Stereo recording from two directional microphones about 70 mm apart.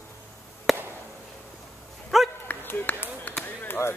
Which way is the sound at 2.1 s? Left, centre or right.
Centre.